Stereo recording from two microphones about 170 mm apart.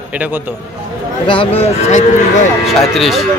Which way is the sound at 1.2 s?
30° left (ahead or behind).